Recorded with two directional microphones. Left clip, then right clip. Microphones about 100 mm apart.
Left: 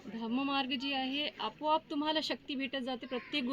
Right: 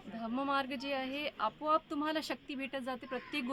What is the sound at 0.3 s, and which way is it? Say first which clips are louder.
Speech: even; 35° right (ahead or behind).